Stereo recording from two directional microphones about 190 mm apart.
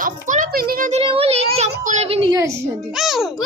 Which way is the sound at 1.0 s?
30° right (ahead or behind).